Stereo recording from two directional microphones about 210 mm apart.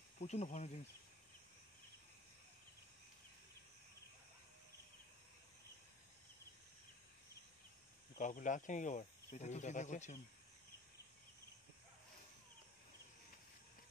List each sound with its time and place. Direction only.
0.2 s speech: 30° left (ahead or behind)
8.2 s speech: 35° left (ahead or behind)